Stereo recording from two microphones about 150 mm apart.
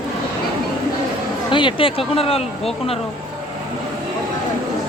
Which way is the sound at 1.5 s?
35° left (ahead or behind).